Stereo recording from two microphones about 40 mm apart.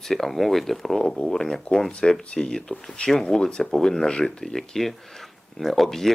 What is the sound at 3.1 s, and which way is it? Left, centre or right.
Speech, centre.